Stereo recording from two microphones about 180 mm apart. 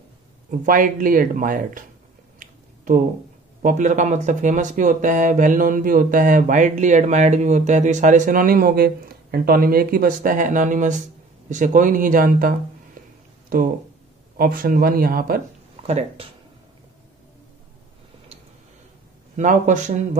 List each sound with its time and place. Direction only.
0.5 s speech: 50° right (ahead or behind)
2.3 s a sound: 45° right (ahead or behind)
3.6 s speech: 45° right (ahead or behind)
14.3 s speech: 50° right (ahead or behind)
15.7 s speech: 35° right (ahead or behind)
19.3 s speech: 45° right (ahead or behind)